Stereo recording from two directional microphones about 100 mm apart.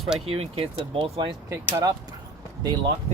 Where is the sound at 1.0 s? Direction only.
55° right (ahead or behind).